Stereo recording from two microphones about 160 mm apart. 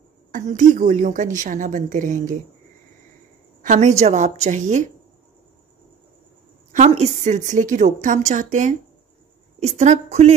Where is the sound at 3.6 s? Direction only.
50° right (ahead or behind).